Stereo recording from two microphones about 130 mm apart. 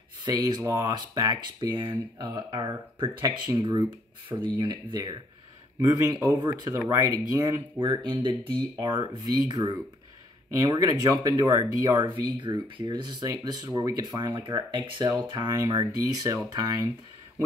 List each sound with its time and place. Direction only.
0.2 s speech: 30° right (ahead or behind)
7.8 s speech: 40° right (ahead or behind)
12.0 s speech: 35° right (ahead or behind)